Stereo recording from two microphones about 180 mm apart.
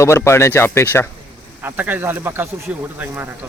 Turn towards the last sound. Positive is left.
turn(degrees=-10)  # may be behind; listen again after turning